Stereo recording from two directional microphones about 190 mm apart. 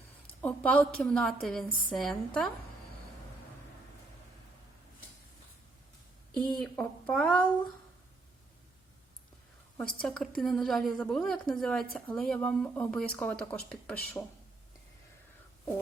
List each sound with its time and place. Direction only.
0.4 s a woman's voice: 10° left (ahead or behind)
6.5 s a woman's voice: 5° left (ahead or behind)
9.7 s a woman's voice: 5° left (ahead or behind)